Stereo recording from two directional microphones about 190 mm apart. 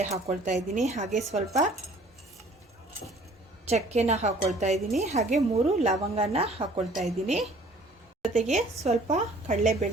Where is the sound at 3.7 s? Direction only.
35° right (ahead or behind).